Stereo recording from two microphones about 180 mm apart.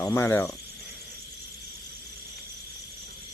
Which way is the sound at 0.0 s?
15° left (ahead or behind).